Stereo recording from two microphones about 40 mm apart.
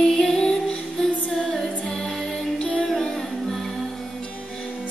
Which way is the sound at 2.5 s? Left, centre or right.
Left.